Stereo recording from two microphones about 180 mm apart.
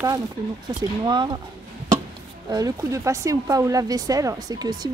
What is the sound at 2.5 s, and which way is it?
Speech, 20° right (ahead or behind).